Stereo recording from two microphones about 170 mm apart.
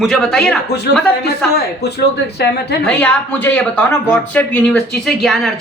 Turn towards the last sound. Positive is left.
turn(degrees=0)  # may be behind; listen again after turning